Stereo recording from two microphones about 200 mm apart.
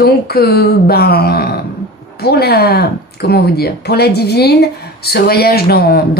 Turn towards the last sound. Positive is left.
turn(degrees=50)  # may be behind; listen again after turning